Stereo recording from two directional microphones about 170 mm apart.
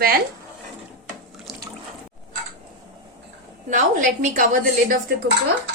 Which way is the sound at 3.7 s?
45° right (ahead or behind).